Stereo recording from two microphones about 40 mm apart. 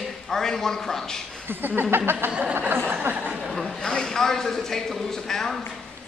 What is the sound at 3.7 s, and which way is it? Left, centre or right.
A man's voice, centre.